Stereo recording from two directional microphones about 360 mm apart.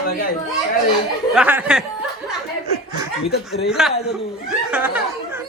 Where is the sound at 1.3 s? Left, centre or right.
Centre.